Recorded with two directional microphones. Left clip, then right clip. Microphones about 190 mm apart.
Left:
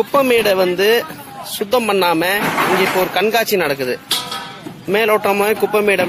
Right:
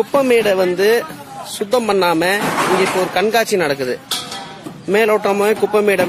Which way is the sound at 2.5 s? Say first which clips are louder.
Even; 20° left (ahead or behind).